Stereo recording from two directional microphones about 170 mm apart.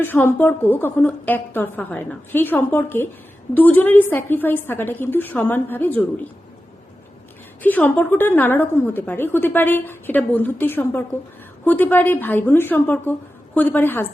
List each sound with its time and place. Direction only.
0.0 s a woman's voice: 15° left (ahead or behind)
7.6 s a woman's voice: 10° left (ahead or behind)